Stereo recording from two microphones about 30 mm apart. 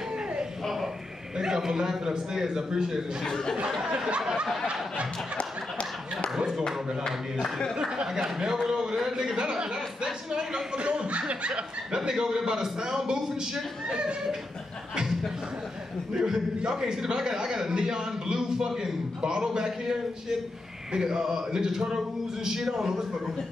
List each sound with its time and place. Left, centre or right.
1.4 s a man's voice: centre
3.3 s speech: centre
3.8 s a man's voice: right
5.4 s a sound: left
8.1 s a man's voice: centre
10.8 s speech: right
11.9 s a man's voice: right
16.1 s a man's voice: right